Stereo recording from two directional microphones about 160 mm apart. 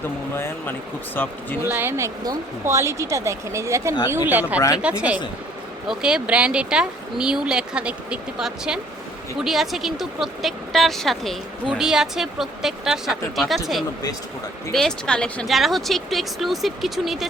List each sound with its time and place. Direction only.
0.3 s speech: 15° left (ahead or behind)
1.6 s speech: 10° right (ahead or behind)
14.7 s speech: 5° left (ahead or behind)